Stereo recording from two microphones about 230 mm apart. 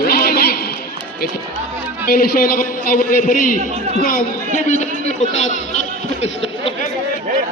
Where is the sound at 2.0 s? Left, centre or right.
Left.